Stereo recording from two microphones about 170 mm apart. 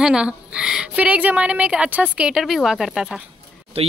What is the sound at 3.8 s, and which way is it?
Speech, 35° right (ahead or behind).